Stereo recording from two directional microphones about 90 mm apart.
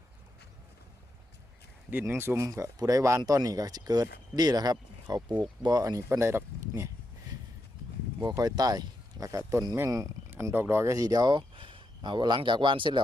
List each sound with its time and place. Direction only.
1.9 s speech: 25° right (ahead or behind)
2.4 s speech: 40° right (ahead or behind)
6.1 s speech: 30° right (ahead or behind)
8.2 s speech: 50° right (ahead or behind)
10.3 s speech: 25° right (ahead or behind); by 13.0 s 65° right (ahead or behind)